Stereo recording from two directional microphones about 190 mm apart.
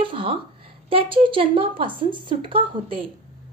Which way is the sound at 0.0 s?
30° right (ahead or behind).